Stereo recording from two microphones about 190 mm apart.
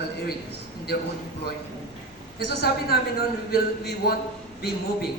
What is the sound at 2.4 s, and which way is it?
A man's voice, 60° left (ahead or behind).